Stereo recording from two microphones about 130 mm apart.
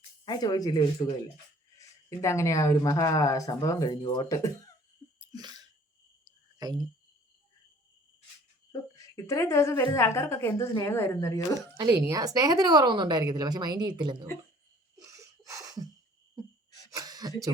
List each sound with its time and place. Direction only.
0.3 s a woman's voice: 30° left (ahead or behind)
5.2 s sneeze: 30° right (ahead or behind)
6.2 s a sound: 30° right (ahead or behind)
9.1 s a woman's voice: 25° left (ahead or behind)
11.8 s a woman's voice: 30° right (ahead or behind)
14.9 s a sound: 25° right (ahead or behind)
16.9 s throat clearing: 30° right (ahead or behind)